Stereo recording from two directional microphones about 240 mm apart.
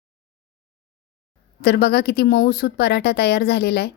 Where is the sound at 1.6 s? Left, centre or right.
Left.